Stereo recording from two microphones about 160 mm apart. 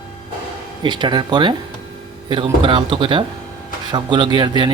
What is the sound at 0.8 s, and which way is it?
Speech, 30° right (ahead or behind).